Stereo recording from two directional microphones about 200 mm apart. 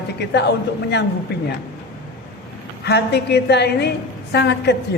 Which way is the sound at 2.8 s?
55° left (ahead or behind).